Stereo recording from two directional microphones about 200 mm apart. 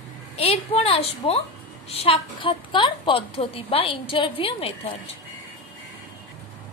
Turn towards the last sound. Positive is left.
turn(degrees=25)  # may be behind; listen again after turning